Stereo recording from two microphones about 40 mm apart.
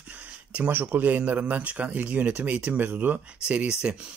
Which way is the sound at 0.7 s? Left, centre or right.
Right.